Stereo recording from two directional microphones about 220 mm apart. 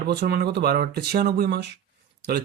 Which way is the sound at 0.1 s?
45° right (ahead or behind).